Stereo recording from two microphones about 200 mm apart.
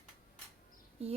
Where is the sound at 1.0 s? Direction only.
30° right (ahead or behind).